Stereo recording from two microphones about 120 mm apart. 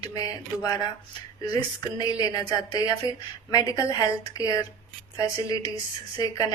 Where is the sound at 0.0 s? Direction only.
30° left (ahead or behind).